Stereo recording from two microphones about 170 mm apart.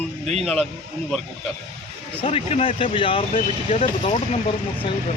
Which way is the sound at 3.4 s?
45° left (ahead or behind).